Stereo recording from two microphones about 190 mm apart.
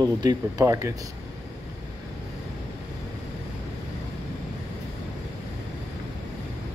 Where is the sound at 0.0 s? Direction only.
20° right (ahead or behind).